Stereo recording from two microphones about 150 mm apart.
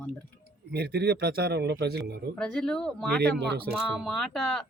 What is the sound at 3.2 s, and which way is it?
Speech, 90° right.